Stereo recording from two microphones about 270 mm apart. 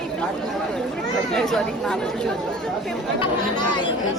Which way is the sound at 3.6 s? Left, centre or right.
Centre.